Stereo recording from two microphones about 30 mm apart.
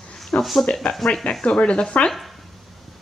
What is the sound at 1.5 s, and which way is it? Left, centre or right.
Speech, left.